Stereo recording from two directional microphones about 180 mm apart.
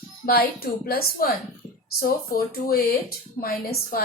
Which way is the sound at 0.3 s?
60° left (ahead or behind).